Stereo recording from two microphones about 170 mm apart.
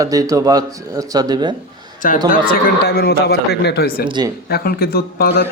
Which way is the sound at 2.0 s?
55° left (ahead or behind).